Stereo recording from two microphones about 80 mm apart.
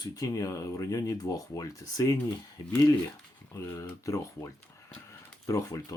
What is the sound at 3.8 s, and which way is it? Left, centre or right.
Speech, left.